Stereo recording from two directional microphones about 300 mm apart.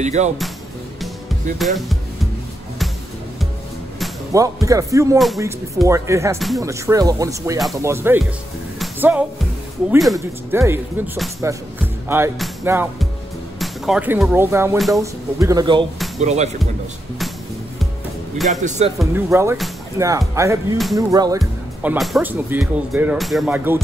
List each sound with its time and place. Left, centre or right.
0.0 s speech: right
1.6 s speech: centre
4.3 s speech: centre
5.2 s speech: centre
8.7 s music: centre
9.8 s speech: centre; by 16.4 s right
18.9 s speech: centre
21.4 s speech: centre